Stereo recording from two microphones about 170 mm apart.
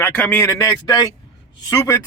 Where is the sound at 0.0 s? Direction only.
10° left (ahead or behind).